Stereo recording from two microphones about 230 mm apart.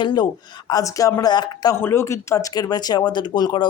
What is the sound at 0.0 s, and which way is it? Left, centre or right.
Speech, centre.